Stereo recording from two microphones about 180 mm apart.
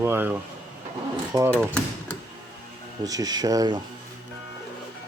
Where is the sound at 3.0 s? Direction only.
20° right (ahead or behind).